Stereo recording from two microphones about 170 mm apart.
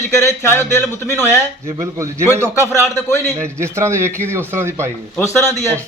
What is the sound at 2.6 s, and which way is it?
Speech, 15° left (ahead or behind).